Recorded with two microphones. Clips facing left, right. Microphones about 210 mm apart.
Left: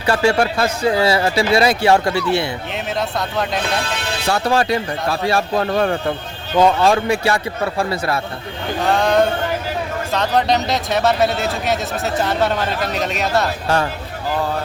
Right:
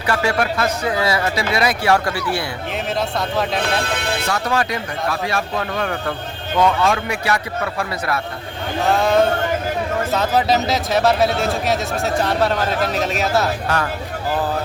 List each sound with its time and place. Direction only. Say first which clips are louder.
0.0 s speech: left 4 dB; 30° left (ahead or behind)
3.2 s speech: even; centre (ahead or behind)
4.3 s speech: left 6 dB; 30° left (ahead or behind)
8.9 s speech: even; centre (ahead or behind)